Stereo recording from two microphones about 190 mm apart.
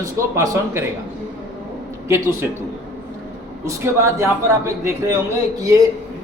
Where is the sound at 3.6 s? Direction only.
15° right (ahead or behind).